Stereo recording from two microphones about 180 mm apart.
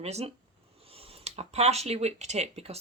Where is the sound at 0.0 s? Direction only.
35° right (ahead or behind).